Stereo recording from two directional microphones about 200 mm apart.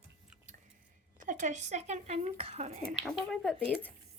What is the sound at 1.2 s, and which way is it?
Speech, 40° right (ahead or behind).